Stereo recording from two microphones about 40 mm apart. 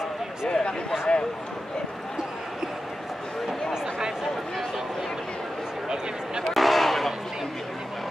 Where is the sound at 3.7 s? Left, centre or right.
Centre.